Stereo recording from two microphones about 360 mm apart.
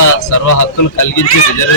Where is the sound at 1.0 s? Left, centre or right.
Left.